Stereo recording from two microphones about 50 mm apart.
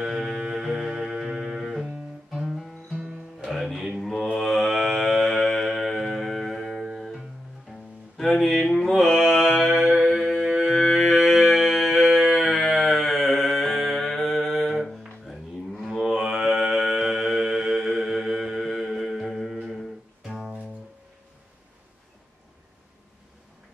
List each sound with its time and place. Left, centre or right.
0.0 s music: centre
4.4 s mantra: centre
6.8 s music: centre
7.7 s music: right
8.2 s mantra: centre
9.3 s music: centre